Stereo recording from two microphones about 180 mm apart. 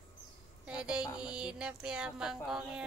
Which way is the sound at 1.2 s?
5° right (ahead or behind).